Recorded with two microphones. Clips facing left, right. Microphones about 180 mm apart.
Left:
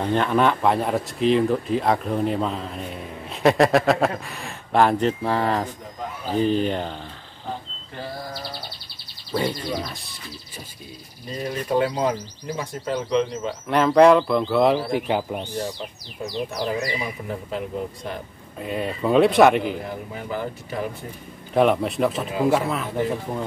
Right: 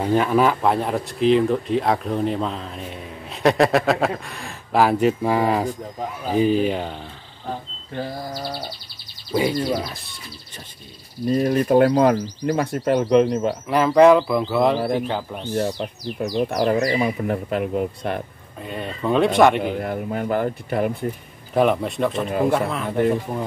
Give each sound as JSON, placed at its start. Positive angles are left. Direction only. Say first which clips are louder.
{"t": 0.0, "sound": "speech", "louder": "right 2 dB", "side_deg": -5}
{"t": 9.3, "sound": "speech", "louder": "right 4 dB", "side_deg": -10}
{"t": 11.2, "sound": "speech", "louder": "right 9 dB", "side_deg": -50}
{"t": 13.7, "sound": "speech", "louder": "right 1 dB", "side_deg": -5}
{"t": 15.0, "sound": "speech", "louder": "left 3 dB", "side_deg": 15}
{"t": 15.5, "sound": "speech", "louder": "right 6 dB", "side_deg": -45}
{"t": 18.6, "sound": "speech", "louder": "left 2 dB", "side_deg": 5}
{"t": 19.6, "sound": "speech", "louder": "right 4 dB", "side_deg": -60}
{"t": 21.5, "sound": "speech", "louder": "even", "side_deg": 0}